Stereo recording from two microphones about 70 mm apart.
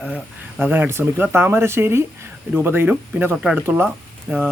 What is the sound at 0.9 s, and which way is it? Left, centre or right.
Speech, right.